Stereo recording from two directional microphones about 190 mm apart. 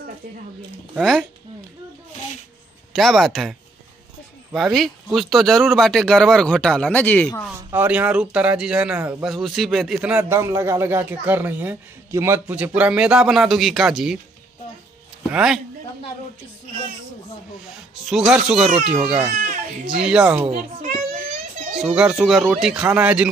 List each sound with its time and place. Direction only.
0.9 s speech: centre (ahead or behind)
2.9 s speech: centre (ahead or behind)
7.7 s speech: 10° right (ahead or behind)
15.3 s speech: 5° right (ahead or behind)
18.0 s speech: centre (ahead or behind)
19.3 s speech: 45° right (ahead or behind)
20.1 s speech: 5° right (ahead or behind)
20.4 s a child's voice: 40° right (ahead or behind)
21.8 s speech: 5° right (ahead or behind)